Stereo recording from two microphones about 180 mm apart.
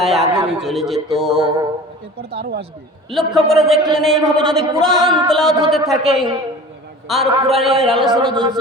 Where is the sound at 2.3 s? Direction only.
65° right (ahead or behind).